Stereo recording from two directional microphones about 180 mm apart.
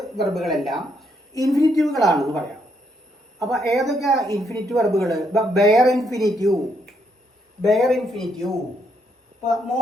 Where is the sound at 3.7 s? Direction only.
Centre (ahead or behind).